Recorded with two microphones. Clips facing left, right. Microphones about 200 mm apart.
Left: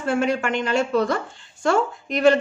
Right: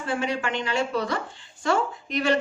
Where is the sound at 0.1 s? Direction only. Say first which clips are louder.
Left 6 dB; 50° left (ahead or behind).